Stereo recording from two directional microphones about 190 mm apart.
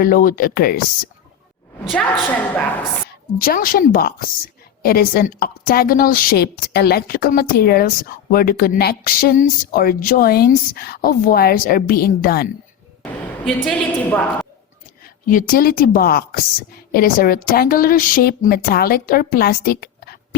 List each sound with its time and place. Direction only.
0.0 s a woman's voice: 45° left (ahead or behind)
1.8 s a woman's voice: centre (ahead or behind)
3.3 s a woman's voice: 50° left (ahead or behind)
13.0 s a woman's voice: 5° left (ahead or behind)
15.3 s a woman's voice: 45° left (ahead or behind)